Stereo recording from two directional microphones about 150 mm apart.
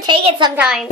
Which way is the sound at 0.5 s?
5° right (ahead or behind).